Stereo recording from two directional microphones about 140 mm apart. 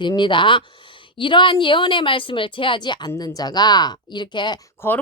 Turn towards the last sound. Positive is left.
turn(degrees=15)  # may be behind; listen again after turning